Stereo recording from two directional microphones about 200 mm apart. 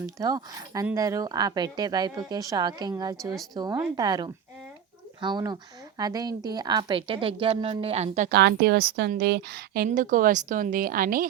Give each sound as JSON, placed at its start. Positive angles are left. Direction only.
{"t": 0.0, "sound": "a woman's voice", "side_deg": -20}
{"t": 8.3, "sound": "a woman's voice", "side_deg": -55}